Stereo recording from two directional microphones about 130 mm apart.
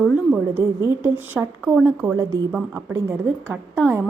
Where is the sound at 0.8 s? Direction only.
20° right (ahead or behind).